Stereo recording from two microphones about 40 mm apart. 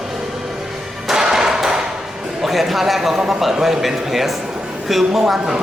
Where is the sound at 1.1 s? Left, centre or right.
Centre.